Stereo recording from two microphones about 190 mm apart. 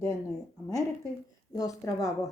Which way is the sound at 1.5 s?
20° left (ahead or behind).